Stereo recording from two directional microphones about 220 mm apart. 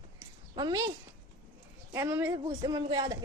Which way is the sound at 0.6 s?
20° right (ahead or behind).